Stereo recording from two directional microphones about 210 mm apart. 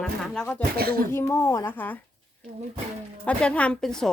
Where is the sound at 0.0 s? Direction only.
5° left (ahead or behind).